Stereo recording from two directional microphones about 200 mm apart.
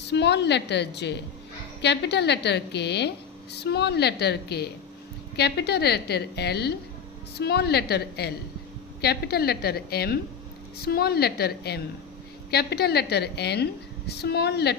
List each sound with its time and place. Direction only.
0.1 s a woman's voice: 60° left (ahead or behind)